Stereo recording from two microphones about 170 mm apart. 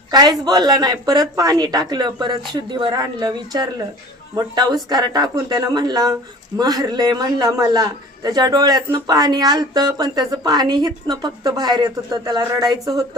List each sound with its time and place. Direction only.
0.1 s a man's voice: 25° right (ahead or behind)